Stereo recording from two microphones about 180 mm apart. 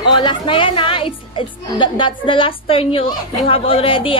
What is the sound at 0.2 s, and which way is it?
Music, 25° left (ahead or behind).